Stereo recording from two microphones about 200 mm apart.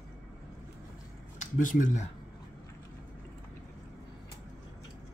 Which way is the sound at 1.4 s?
40° left (ahead or behind).